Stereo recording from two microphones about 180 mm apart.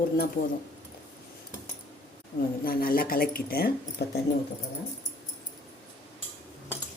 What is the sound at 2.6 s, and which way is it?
A woman's voice, 55° left (ahead or behind).